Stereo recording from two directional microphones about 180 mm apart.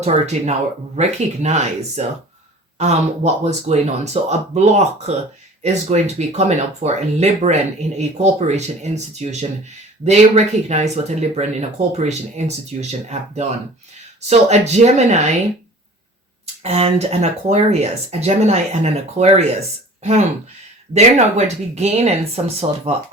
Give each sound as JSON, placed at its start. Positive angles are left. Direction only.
{"t": 0.0, "sound": "speech", "side_deg": -40}
{"t": 16.6, "sound": "speech", "side_deg": -35}